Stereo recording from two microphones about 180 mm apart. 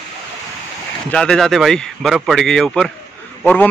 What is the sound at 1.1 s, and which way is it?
A man's voice, 5° left (ahead or behind).